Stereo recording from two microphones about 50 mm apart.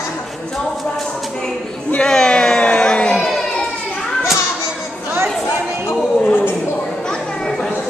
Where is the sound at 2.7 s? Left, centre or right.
Left.